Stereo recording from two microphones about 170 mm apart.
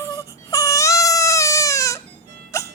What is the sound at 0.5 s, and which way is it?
Baby cry, 20° left (ahead or behind).